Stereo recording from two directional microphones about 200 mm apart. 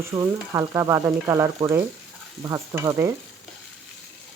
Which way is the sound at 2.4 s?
20° right (ahead or behind).